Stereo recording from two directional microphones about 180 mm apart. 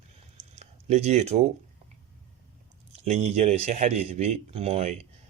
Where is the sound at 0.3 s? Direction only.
40° right (ahead or behind).